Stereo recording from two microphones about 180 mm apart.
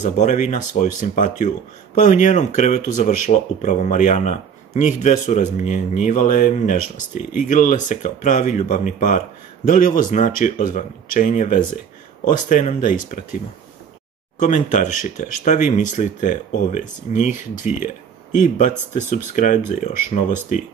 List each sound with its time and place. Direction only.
0.0 s speech: 40° left (ahead or behind)
14.4 s speech: 45° left (ahead or behind)